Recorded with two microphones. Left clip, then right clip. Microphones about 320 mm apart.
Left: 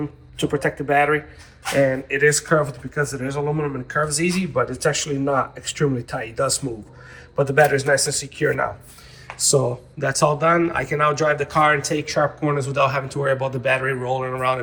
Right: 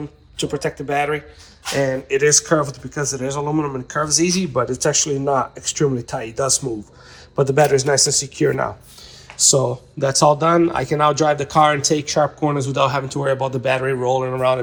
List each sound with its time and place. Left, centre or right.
0.3 s speech: centre